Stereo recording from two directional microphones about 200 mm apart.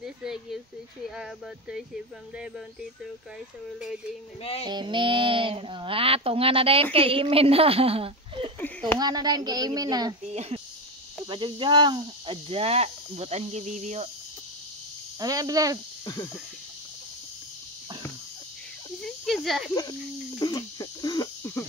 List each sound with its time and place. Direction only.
0.0 s a sound: 5° right (ahead or behind)
1.1 s speech: 5° right (ahead or behind)
4.4 s female singing: 30° left (ahead or behind)
4.6 s speech: 25° right (ahead or behind)
8.5 s a sound: 10° left (ahead or behind)
9.0 s speech: 20° right (ahead or behind)
10.2 s speech: 30° right (ahead or behind)
15.1 s speech: 20° right (ahead or behind)
19.0 s snake: centre (ahead or behind)
19.7 s speech: 20° left (ahead or behind)